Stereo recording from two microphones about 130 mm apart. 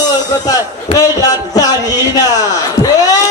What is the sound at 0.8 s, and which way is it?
Speech, 30° left (ahead or behind).